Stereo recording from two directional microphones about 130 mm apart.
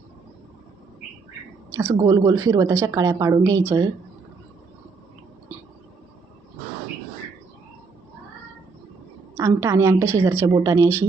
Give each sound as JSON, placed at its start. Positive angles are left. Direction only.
{"t": 1.7, "sound": "a woman's voice", "side_deg": -25}
{"t": 9.4, "sound": "a woman's voice", "side_deg": -25}